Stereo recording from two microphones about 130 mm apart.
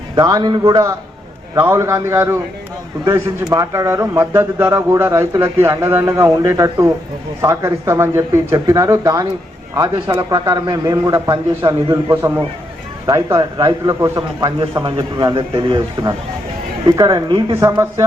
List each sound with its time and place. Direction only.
0.2 s a man's voice: 30° right (ahead or behind)
16.8 s a man's voice: 30° right (ahead or behind)
17.7 s a man's voice: 25° right (ahead or behind)